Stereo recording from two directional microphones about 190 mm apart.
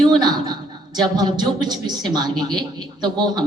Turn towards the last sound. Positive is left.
turn(degrees=-20)  # may be behind; listen again after turning